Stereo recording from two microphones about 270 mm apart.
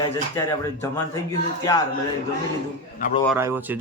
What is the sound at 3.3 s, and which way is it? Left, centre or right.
Speech, centre.